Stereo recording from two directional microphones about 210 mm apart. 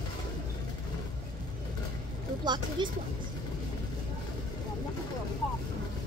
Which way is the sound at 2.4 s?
20° right (ahead or behind).